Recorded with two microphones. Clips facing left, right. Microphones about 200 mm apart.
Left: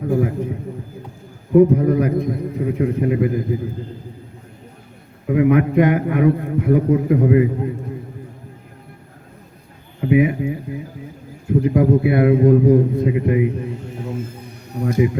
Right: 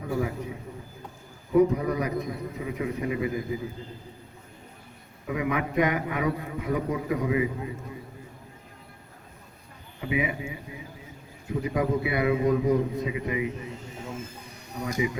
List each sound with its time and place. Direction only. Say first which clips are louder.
0.1 s a man's voice: left 9 dB; 55° left (ahead or behind)
1.5 s a man's voice: left 9 dB; 55° left (ahead or behind)
5.2 s a man's voice: left 13 dB; 55° left (ahead or behind)
10.0 s a man's voice: left 12 dB; 55° left (ahead or behind)
14.8 s a man's voice: left 10 dB; 55° left (ahead or behind)